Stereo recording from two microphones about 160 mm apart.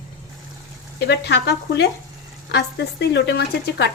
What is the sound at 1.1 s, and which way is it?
A woman's voice, 90° left.